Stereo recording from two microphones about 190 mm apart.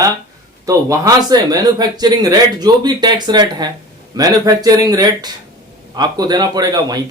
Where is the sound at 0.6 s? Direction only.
20° right (ahead or behind).